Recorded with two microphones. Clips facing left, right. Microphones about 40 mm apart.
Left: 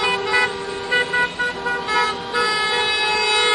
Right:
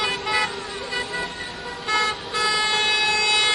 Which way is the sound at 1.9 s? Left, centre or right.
Centre.